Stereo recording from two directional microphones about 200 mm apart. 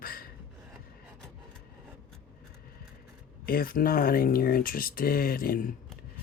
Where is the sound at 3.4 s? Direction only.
45° left (ahead or behind).